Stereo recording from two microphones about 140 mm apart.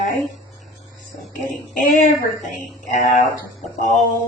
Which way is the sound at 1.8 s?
70° left (ahead or behind).